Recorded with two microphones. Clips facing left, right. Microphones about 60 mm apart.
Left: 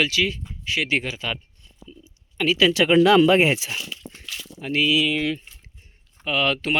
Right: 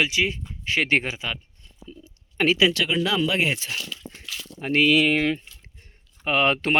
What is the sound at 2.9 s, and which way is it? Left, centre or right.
Speech, left.